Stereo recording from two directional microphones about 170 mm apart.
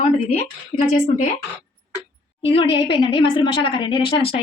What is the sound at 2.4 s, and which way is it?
A woman's voice, 30° left (ahead or behind).